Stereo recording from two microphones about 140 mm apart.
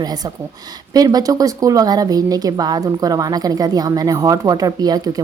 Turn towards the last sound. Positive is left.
turn(degrees=-25)  # may be behind; listen again after turning